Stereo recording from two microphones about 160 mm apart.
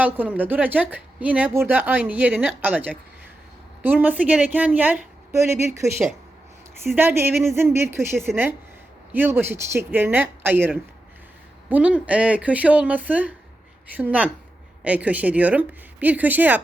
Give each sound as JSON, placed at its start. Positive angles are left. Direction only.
{"t": 0.0, "sound": "a woman's voice", "side_deg": -10}